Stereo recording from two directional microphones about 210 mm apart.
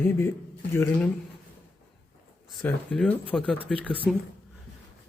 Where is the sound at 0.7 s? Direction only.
10° left (ahead or behind).